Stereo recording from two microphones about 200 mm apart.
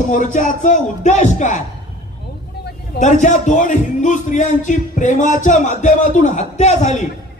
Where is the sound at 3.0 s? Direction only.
35° left (ahead or behind).